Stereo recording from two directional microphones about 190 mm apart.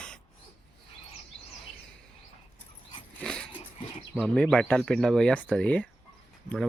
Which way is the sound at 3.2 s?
5° left (ahead or behind).